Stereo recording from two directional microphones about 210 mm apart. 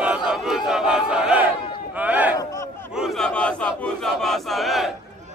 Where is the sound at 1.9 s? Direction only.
5° right (ahead or behind).